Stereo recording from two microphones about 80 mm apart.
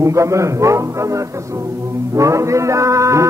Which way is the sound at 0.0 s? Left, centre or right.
Right.